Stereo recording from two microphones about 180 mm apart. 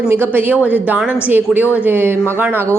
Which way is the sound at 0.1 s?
10° right (ahead or behind).